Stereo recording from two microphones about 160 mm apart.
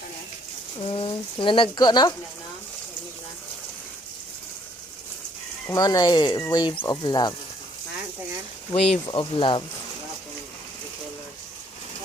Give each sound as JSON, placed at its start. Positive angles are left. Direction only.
{"t": 0.8, "sound": "speech", "side_deg": 35}
{"t": 5.6, "sound": "speech", "side_deg": 20}
{"t": 8.7, "sound": "speech", "side_deg": 40}